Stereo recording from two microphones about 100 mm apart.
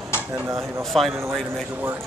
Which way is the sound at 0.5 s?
30° right (ahead or behind).